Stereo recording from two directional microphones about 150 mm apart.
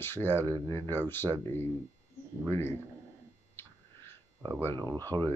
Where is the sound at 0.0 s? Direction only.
15° left (ahead or behind).